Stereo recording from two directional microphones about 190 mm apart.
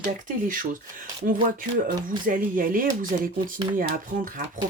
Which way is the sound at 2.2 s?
45° right (ahead or behind).